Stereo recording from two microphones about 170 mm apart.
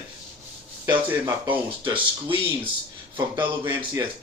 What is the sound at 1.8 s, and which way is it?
Speech, 30° right (ahead or behind).